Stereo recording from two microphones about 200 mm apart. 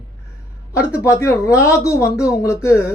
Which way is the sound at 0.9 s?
15° left (ahead or behind).